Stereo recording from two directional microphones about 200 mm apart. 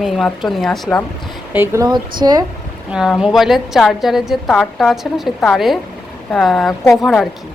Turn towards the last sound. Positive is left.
turn(degrees=0)  # may be behind; listen again after turning